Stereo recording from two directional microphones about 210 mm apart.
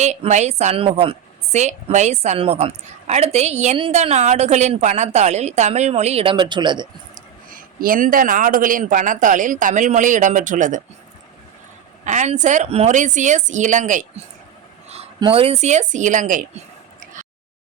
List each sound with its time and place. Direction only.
0.0 s a woman's voice: 35° right (ahead or behind)
7.5 s a woman's voice: 40° right (ahead or behind)
12.0 s a woman's voice: 35° right (ahead or behind)